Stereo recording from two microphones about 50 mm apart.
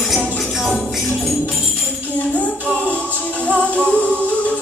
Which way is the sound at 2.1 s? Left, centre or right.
Left.